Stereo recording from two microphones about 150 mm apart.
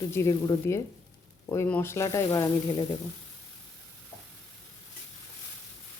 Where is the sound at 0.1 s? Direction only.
20° left (ahead or behind).